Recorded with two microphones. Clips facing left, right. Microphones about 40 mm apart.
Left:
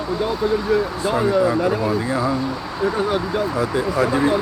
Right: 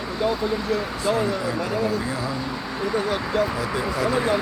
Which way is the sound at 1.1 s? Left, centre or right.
Centre.